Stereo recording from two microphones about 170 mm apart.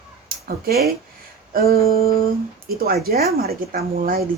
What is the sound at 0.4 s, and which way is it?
Speech, 60° right (ahead or behind).